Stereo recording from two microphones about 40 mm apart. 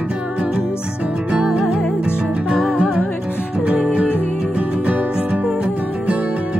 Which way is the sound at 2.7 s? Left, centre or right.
Right.